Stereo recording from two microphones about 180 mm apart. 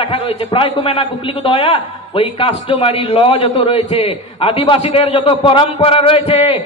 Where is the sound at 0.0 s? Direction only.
30° left (ahead or behind).